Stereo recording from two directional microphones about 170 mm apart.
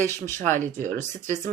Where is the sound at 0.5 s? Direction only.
50° right (ahead or behind).